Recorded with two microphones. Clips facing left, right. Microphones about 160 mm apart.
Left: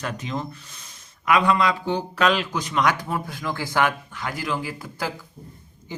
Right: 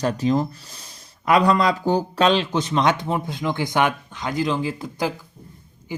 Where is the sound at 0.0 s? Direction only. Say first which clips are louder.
Right 9 dB; 35° right (ahead or behind).